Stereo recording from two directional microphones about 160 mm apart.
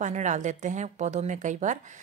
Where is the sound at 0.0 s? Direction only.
50° right (ahead or behind).